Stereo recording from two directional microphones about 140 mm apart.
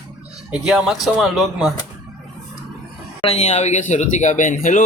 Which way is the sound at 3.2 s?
50° left (ahead or behind).